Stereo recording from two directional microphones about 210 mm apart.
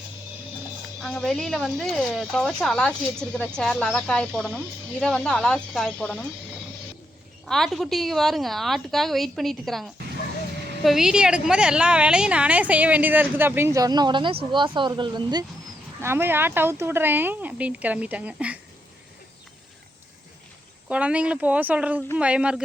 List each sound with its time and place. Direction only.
0.9 s speech: centre (ahead or behind)
7.4 s a woman's voice: centre (ahead or behind)
20.8 s a woman's voice: 5° right (ahead or behind)